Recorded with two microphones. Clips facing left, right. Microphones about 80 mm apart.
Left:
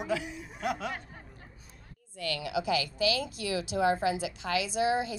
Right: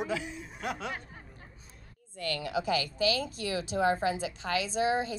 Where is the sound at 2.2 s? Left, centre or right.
Right.